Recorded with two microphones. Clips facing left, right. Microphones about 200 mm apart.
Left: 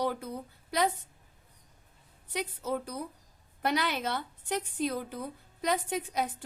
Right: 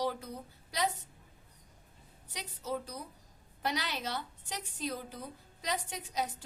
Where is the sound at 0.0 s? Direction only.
55° left (ahead or behind).